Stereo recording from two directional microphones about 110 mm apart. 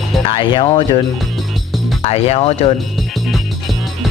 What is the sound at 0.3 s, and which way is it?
Speech, 45° left (ahead or behind).